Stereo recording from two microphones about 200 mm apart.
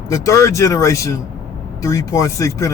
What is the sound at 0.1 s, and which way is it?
Speech, 15° left (ahead or behind).